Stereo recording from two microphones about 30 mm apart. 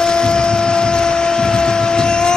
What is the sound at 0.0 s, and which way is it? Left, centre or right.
Vehicle, left.